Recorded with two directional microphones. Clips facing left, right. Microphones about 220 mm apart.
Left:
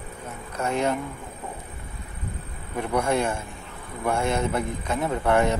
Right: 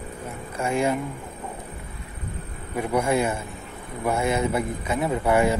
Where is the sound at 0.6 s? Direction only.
5° right (ahead or behind).